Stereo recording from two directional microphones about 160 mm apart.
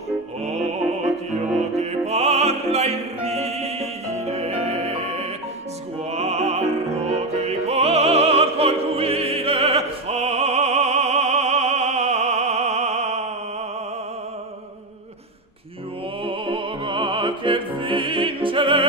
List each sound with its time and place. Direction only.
1.8 s opera: 45° right (ahead or behind)
6.1 s music: 40° right (ahead or behind)
16.3 s music: 30° right (ahead or behind)